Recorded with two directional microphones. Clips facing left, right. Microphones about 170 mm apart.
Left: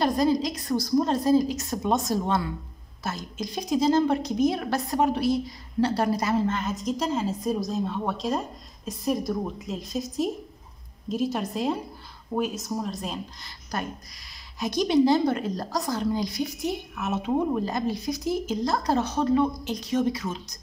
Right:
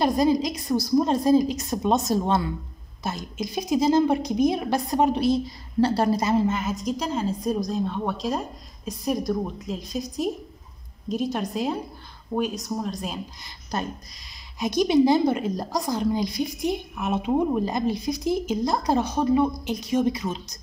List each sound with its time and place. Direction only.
0.0 s a woman's voice: 15° right (ahead or behind)
5.8 s a woman's voice: 30° right (ahead or behind)
6.4 s a woman's voice: 10° right (ahead or behind)
13.7 s a woman's voice: 25° right (ahead or behind)